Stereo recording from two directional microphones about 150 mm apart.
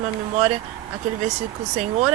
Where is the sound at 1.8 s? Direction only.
50° right (ahead or behind).